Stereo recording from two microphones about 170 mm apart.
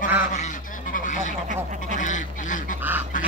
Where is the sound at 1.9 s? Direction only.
50° left (ahead or behind).